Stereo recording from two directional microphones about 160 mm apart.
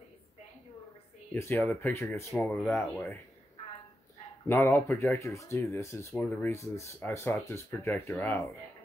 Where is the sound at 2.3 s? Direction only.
5° left (ahead or behind).